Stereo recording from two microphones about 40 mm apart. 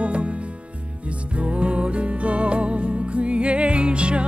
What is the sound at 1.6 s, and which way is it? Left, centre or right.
Music, right.